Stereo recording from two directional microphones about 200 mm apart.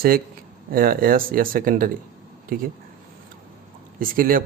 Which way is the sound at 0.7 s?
45° right (ahead or behind).